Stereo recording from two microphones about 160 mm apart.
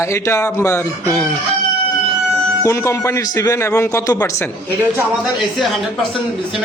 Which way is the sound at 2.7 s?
15° left (ahead or behind).